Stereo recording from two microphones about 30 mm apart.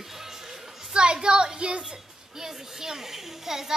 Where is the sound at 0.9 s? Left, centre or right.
Right.